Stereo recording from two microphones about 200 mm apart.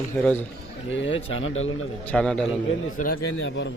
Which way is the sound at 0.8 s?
65° left (ahead or behind).